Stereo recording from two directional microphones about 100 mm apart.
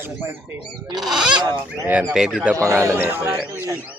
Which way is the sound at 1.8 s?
15° right (ahead or behind).